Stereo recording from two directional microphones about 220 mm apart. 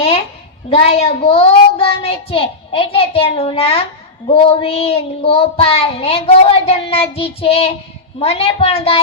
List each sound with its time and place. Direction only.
0.7 s child singing: 25° left (ahead or behind)